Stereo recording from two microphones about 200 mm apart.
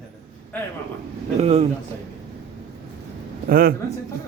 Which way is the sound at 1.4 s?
30° right (ahead or behind).